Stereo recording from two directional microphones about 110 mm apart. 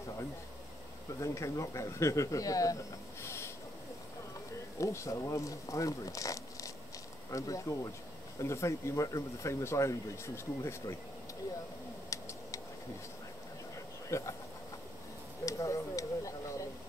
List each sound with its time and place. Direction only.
1.2 s speech: 30° left (ahead or behind)
4.7 s speech: 30° left (ahead or behind)
12.1 s tick: 30° left (ahead or behind)
14.0 s speech: 25° left (ahead or behind)
15.4 s a sound: 30° left (ahead or behind)